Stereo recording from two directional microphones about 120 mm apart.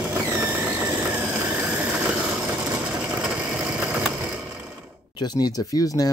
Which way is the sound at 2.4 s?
5° right (ahead or behind).